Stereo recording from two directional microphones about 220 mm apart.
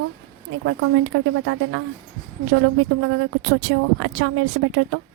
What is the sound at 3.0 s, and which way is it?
A woman's voice, 65° right (ahead or behind).